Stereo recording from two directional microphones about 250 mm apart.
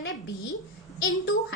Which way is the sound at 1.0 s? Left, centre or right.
Left.